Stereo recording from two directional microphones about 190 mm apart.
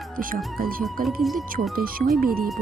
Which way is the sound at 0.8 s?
Centre (ahead or behind).